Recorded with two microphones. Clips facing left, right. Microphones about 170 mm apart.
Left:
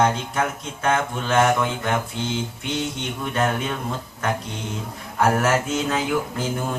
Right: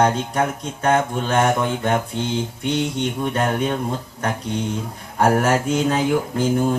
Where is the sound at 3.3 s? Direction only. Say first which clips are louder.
Right 1 dB; 35° right (ahead or behind).